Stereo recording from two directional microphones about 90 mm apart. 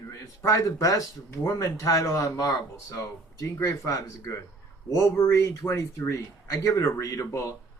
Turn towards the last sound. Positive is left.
turn(degrees=35)  # may be behind; listen again after turning